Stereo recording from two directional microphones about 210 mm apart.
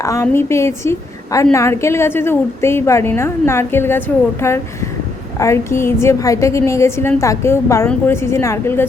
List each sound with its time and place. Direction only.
0.0 s a woman's voice: 15° left (ahead or behind)